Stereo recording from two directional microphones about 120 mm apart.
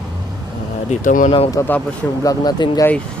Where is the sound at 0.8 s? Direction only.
90° left.